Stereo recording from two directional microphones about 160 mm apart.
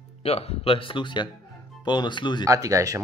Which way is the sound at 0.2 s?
35° left (ahead or behind).